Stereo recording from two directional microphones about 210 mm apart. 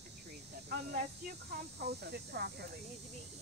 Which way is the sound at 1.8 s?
50° right (ahead or behind).